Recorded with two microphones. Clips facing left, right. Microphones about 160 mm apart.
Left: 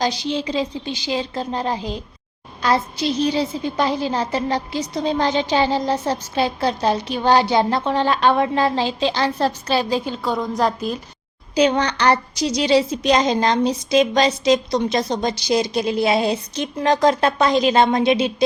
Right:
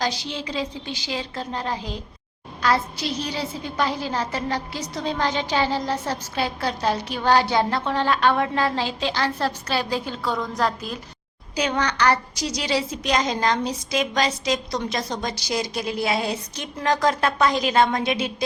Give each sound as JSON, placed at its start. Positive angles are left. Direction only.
{"t": 0.0, "sound": "a woman's voice", "side_deg": 20}